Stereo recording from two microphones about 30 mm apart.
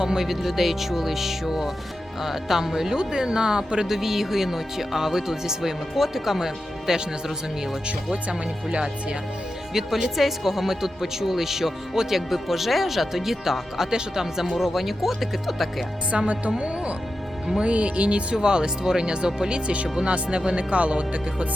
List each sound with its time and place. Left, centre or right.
0.0 s speech: right
0.3 s speech: centre
3.0 s speech: right
3.8 s speech: centre
7.9 s speech: right
9.7 s speech: centre
14.5 s speech: centre
16.1 s speech: right
18.3 s speech: right